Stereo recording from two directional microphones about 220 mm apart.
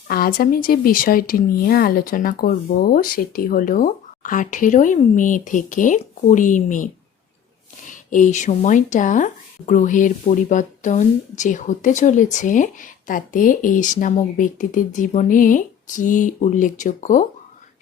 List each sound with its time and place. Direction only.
0.1 s speech: 40° left (ahead or behind)